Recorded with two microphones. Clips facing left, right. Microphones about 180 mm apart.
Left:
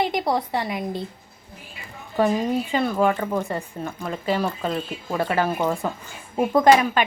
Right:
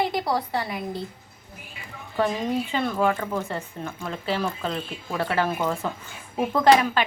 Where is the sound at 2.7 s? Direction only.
10° left (ahead or behind).